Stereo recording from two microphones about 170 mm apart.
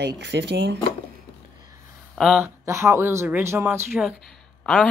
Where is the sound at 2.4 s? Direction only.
15° right (ahead or behind).